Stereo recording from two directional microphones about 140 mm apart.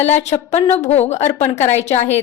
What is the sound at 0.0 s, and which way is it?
A woman's voice, 55° left (ahead or behind).